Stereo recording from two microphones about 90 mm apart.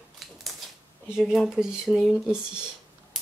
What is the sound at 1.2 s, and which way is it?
Speech, centre (ahead or behind).